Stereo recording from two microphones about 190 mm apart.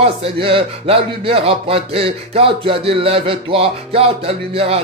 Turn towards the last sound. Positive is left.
turn(degrees=-30)  # may be behind; listen again after turning